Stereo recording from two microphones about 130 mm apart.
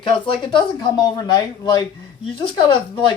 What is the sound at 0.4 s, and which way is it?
Speech, 35° left (ahead or behind).